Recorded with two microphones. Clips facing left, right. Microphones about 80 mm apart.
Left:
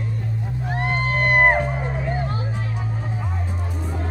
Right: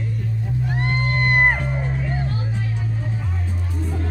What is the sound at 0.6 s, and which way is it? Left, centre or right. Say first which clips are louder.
Music: left 2 dB; centre.